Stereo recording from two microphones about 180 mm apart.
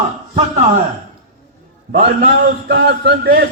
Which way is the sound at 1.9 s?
60° right (ahead or behind).